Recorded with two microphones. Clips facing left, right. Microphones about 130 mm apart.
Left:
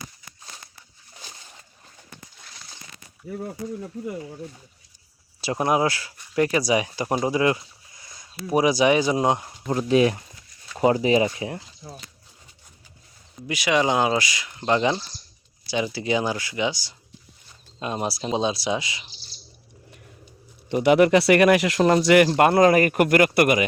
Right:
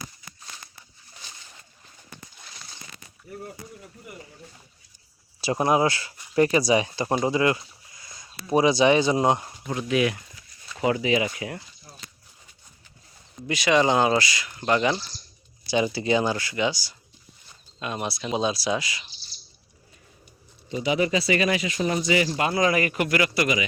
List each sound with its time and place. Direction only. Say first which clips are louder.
3.9 s speech: left 14 dB; 80° left
5.4 s speech: even; centre (ahead or behind)
7.3 s a sound: left 2 dB; 15° left (ahead or behind)
8.2 s speech: even; 10° left (ahead or behind)
9.6 s speech: left 5 dB; 35° left (ahead or behind)
11.3 s speech: left 3 dB; 25° left (ahead or behind)
13.5 s speech: right 1 dB; 10° left (ahead or behind)
15.6 s speech: right 2 dB; centre (ahead or behind); by 16.9 s 20° left (ahead or behind)
17.7 s speech: left 3 dB; 30° left (ahead or behind)
20.7 s speech: left 7 dB; 65° left (ahead or behind)